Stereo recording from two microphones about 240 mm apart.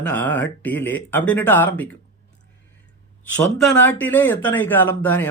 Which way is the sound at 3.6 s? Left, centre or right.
Centre.